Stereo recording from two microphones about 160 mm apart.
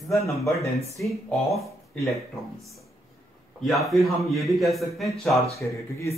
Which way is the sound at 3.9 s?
Centre (ahead or behind).